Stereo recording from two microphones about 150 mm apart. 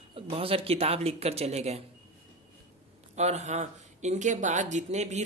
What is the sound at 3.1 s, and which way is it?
Speech, 45° right (ahead or behind).